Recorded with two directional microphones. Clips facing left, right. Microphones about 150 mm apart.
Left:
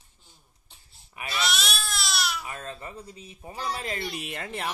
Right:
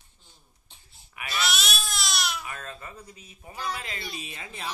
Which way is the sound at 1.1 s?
30° left (ahead or behind).